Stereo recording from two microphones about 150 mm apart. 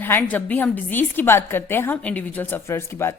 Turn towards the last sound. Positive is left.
turn(degrees=20)  # may be behind; listen again after turning